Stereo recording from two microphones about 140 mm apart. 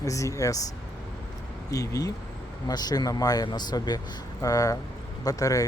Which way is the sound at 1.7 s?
25° left (ahead or behind).